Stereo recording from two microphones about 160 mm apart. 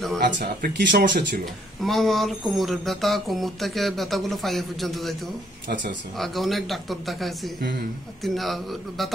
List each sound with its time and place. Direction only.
0.2 s speech: 80° right
1.4 s speech: centre (ahead or behind)
6.1 s speech: centre (ahead or behind)